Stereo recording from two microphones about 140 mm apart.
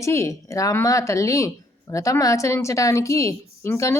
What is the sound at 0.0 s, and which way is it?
Speech, 20° left (ahead or behind).